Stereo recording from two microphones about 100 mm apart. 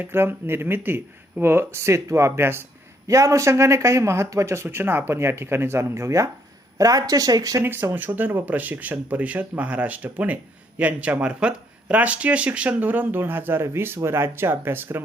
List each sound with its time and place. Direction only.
0.0 s speech: 20° right (ahead or behind); by 7.6 s 35° right (ahead or behind)
7.6 s speech: 20° right (ahead or behind)